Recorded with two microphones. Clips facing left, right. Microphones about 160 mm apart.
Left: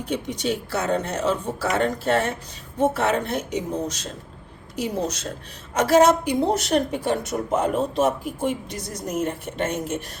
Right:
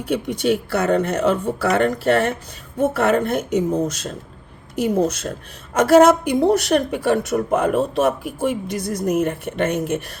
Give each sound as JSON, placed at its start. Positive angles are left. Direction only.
{"t": 0.1, "sound": "a woman's voice", "side_deg": -60}